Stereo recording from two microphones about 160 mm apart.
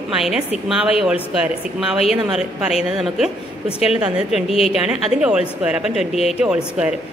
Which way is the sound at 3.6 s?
40° left (ahead or behind).